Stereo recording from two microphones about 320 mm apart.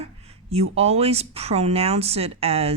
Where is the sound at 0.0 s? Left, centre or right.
Centre.